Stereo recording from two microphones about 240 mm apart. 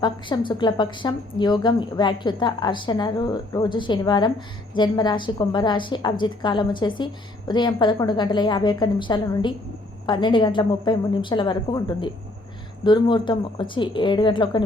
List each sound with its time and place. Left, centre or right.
0.0 s a woman's voice: centre